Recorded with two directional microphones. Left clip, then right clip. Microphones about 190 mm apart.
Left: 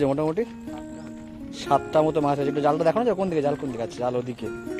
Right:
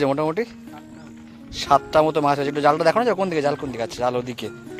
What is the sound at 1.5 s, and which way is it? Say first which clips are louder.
A man's voice: right 4 dB; 5° right (ahead or behind).